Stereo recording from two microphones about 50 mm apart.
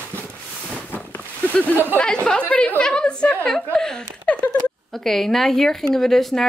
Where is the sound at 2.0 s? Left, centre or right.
Centre.